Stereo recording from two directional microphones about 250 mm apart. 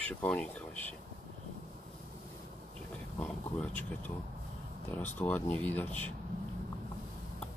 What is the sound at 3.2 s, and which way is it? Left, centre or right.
Speech, centre.